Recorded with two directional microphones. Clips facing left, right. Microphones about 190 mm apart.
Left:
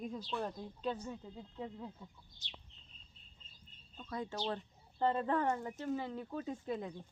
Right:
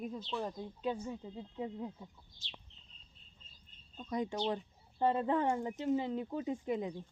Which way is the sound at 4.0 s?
15° right (ahead or behind).